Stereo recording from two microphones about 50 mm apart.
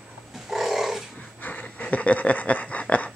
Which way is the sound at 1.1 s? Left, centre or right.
Left.